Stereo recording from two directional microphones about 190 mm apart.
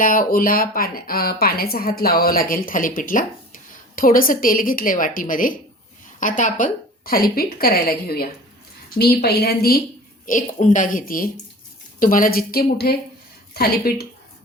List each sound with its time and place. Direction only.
0.0 s speech: 45° left (ahead or behind)
10.2 s speech: 45° left (ahead or behind)